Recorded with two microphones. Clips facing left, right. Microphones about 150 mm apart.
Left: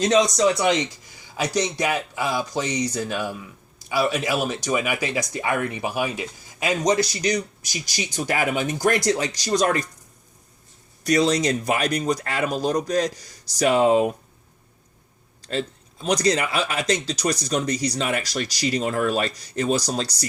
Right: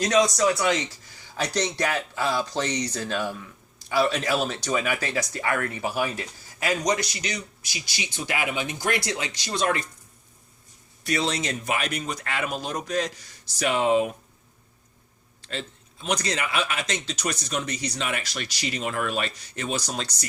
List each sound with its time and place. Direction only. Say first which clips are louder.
0.0 s speech: left 3 dB; 25° left (ahead or behind)
6.9 s a man's voice: left 7 dB; 35° left (ahead or behind)
11.0 s a man's voice: left 7 dB; 40° left (ahead or behind)
15.4 s a man's voice: left 8 dB; 40° left (ahead or behind)